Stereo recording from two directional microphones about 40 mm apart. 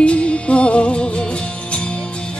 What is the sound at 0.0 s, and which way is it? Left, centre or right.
Music, left.